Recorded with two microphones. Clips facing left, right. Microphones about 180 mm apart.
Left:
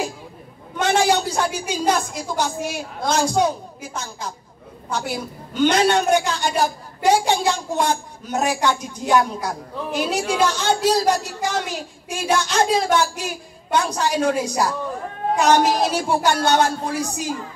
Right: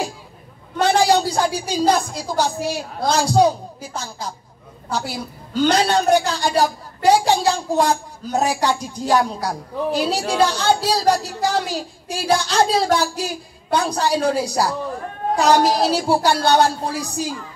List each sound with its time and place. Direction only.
0.7 s a woman's voice: 35° right (ahead or behind)